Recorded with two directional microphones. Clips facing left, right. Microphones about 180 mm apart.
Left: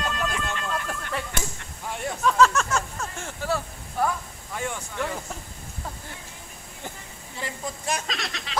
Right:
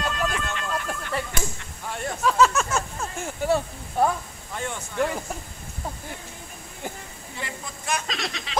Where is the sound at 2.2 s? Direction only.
5° right (ahead or behind).